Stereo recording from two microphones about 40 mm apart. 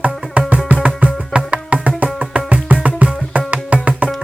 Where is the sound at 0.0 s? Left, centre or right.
Right.